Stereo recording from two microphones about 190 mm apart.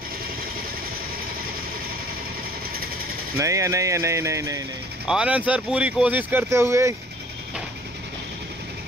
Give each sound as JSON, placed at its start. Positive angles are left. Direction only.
{"t": 3.3, "sound": "speech", "side_deg": -15}
{"t": 5.0, "sound": "speech", "side_deg": -5}